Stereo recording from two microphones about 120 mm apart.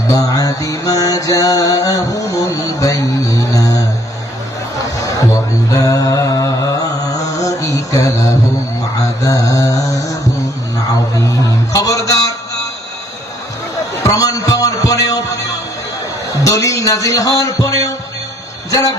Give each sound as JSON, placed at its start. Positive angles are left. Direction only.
{"t": 0.1, "sound": "mantra", "side_deg": 30}
{"t": 5.7, "sound": "music", "side_deg": 30}
{"t": 7.4, "sound": "mantra", "side_deg": 30}
{"t": 9.2, "sound": "a man's voice", "side_deg": 30}
{"t": 11.1, "sound": "music", "side_deg": 30}
{"t": 14.0, "sound": "a sound", "side_deg": 30}
{"t": 16.4, "sound": "a man's voice", "side_deg": 25}